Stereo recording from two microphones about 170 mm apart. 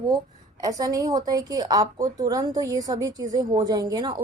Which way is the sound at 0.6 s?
20° right (ahead or behind).